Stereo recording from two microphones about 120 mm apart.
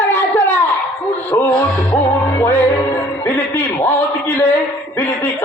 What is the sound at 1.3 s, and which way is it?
Music, 15° left (ahead or behind).